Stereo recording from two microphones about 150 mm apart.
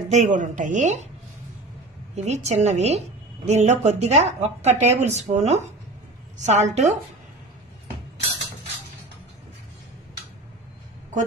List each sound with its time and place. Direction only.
0.1 s a woman's voice: 55° right (ahead or behind)
2.1 s a woman's voice: 50° right (ahead or behind)